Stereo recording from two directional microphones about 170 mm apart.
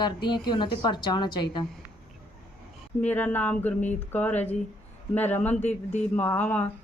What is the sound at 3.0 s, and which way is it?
Speech, 10° left (ahead or behind).